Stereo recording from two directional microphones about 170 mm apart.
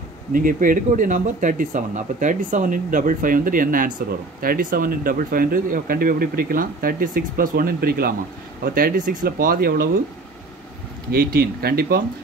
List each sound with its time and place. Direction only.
0.3 s speech: 55° right (ahead or behind)
11.1 s speech: 65° right (ahead or behind)